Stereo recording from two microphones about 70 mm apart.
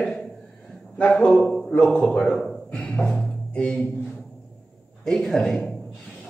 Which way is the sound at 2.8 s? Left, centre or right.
Centre.